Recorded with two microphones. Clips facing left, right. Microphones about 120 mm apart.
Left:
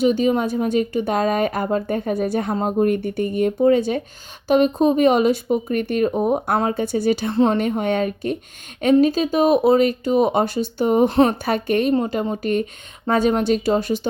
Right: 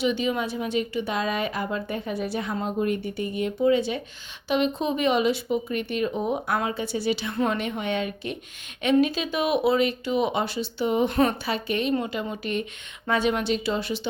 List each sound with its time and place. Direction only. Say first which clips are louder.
0.0 s a woman's voice: left 7 dB; 45° left (ahead or behind)
7.3 s a woman's voice: left 8 dB; 35° left (ahead or behind)
11.1 s speech: left 6 dB; 35° left (ahead or behind)
11.4 s a woman's voice: left 7 dB; 50° left (ahead or behind)
11.9 s a woman's voice: left 7 dB; 35° left (ahead or behind)